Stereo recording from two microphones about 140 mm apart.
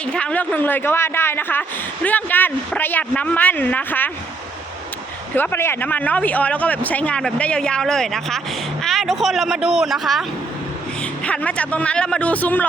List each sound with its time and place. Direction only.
0.1 s speech: 10° left (ahead or behind)
5.3 s speech: 15° left (ahead or behind); by 10.2 s centre (ahead or behind)
11.3 s speech: 10° left (ahead or behind)